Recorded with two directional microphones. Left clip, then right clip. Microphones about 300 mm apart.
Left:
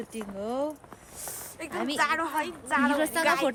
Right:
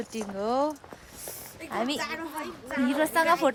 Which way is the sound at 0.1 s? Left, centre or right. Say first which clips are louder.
Right 6 dB; centre.